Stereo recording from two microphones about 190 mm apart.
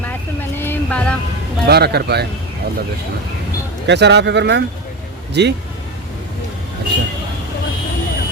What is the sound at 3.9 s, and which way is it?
Speech, 65° right (ahead or behind).